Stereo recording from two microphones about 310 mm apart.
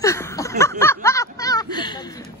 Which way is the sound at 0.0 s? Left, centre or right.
Centre.